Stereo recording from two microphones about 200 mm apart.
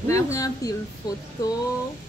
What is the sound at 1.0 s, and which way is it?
Music, 20° left (ahead or behind).